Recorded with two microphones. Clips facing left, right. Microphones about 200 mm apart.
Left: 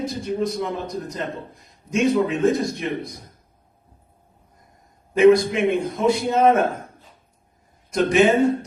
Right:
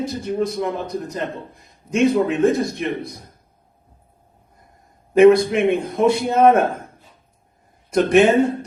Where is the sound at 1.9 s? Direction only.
60° right (ahead or behind).